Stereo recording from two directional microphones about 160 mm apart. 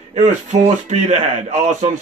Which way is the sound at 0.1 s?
45° right (ahead or behind).